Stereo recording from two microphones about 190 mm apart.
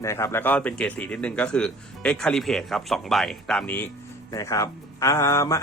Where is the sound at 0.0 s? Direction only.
15° left (ahead or behind).